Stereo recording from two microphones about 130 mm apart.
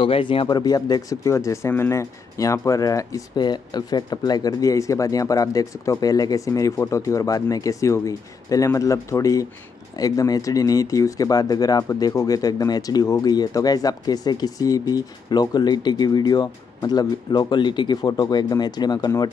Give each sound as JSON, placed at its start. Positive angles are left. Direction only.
{"t": 0.0, "sound": "speech", "side_deg": 40}